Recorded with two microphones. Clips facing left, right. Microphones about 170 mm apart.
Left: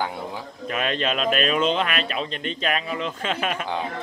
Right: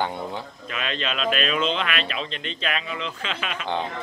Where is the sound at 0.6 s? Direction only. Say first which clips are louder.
Left 5 dB; 45° left (ahead or behind).